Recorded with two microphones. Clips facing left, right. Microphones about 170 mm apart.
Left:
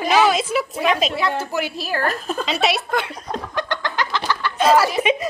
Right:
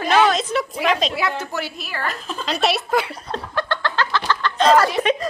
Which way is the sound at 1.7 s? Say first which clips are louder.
Left 5 dB; 40° left (ahead or behind).